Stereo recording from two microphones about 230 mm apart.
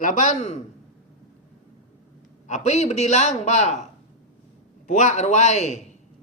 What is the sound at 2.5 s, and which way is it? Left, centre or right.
Speech, left.